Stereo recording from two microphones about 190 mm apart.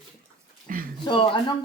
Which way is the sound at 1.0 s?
25° left (ahead or behind).